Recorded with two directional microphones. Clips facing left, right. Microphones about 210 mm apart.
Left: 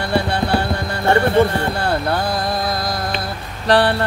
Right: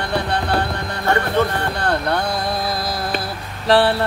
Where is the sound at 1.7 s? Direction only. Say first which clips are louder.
Left 1 dB; 5° left (ahead or behind).